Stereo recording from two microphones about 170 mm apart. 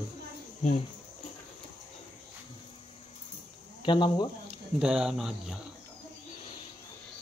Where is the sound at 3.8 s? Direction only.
25° left (ahead or behind).